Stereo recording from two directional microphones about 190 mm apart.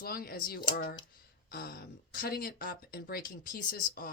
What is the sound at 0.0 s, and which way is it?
Speech, 50° left (ahead or behind).